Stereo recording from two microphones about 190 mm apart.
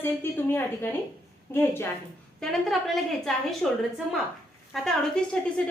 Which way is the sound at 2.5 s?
Centre (ahead or behind).